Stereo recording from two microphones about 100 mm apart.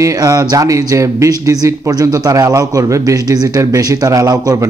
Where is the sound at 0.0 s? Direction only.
35° right (ahead or behind).